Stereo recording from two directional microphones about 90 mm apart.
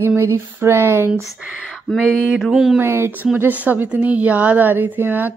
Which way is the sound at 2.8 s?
25° right (ahead or behind).